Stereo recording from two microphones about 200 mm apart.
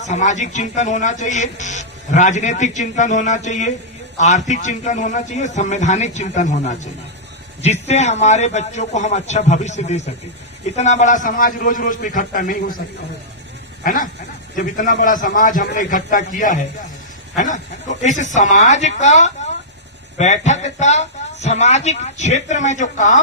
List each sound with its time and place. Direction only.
0.0 s speech: 35° left (ahead or behind)
13.8 s speech: 40° left (ahead or behind)